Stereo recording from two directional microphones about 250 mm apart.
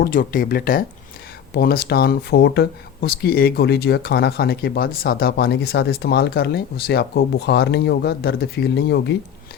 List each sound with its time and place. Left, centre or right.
0.0 s speech: left